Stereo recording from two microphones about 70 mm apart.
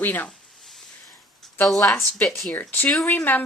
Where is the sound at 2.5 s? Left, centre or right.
Left.